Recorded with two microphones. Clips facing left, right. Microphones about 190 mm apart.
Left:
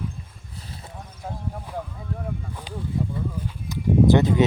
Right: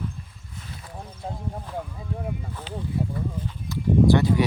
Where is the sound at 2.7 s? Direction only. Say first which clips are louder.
Right 1 dB; 15° left (ahead or behind).